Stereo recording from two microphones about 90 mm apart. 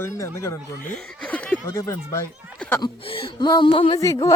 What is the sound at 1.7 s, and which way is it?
Speech, 35° left (ahead or behind).